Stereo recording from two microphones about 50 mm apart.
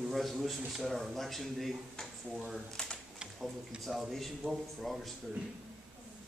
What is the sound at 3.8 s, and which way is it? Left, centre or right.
A man's voice, centre.